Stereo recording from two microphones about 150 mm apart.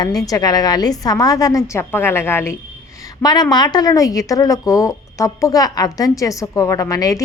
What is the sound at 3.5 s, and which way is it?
A woman's voice, 30° left (ahead or behind).